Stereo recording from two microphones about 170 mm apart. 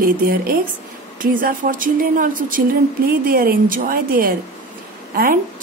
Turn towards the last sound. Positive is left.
turn(degrees=-55)  # may be behind; listen again after turning